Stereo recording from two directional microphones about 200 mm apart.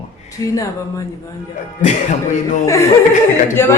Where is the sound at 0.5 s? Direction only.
15° left (ahead or behind).